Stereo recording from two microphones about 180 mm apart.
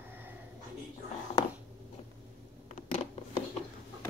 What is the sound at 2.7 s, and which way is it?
Zipper, 35° left (ahead or behind).